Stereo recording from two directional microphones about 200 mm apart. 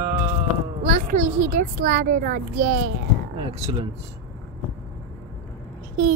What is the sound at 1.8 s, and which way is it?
A child's voice, 40° right (ahead or behind).